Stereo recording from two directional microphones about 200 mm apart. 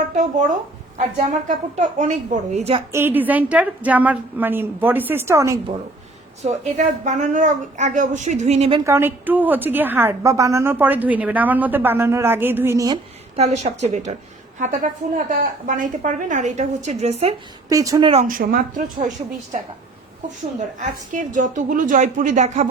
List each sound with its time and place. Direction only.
0.2 s a woman's voice: 40° right (ahead or behind)
2.9 s a woman's voice: 10° right (ahead or behind)
6.4 s a woman's voice: 35° right (ahead or behind)
8.9 s a woman's voice: 10° right (ahead or behind)
13.3 s a woman's voice: 35° right (ahead or behind)
17.7 s a woman's voice: 15° right (ahead or behind)
18.1 s a woman's voice: 40° right (ahead or behind)
20.6 s a woman's voice: 40° right (ahead or behind)